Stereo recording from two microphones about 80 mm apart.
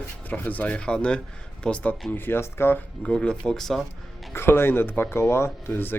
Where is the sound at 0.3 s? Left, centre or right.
Left.